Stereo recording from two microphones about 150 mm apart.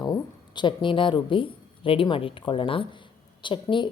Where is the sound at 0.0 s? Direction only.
30° left (ahead or behind).